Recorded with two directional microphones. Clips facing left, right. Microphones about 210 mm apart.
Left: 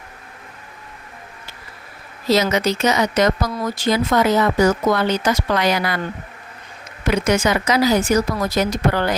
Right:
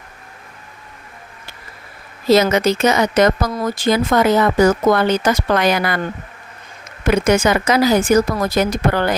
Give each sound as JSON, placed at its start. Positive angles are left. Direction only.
{"t": 2.2, "sound": "speech", "side_deg": -50}
{"t": 7.0, "sound": "speech", "side_deg": -50}